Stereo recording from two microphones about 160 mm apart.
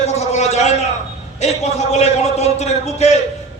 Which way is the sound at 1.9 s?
45° left (ahead or behind).